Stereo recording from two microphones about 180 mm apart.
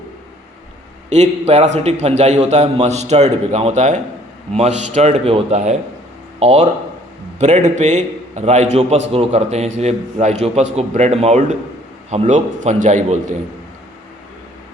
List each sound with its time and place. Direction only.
1.1 s a man's voice: 40° right (ahead or behind)